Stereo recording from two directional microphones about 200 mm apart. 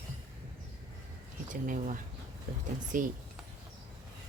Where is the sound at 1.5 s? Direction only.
40° right (ahead or behind).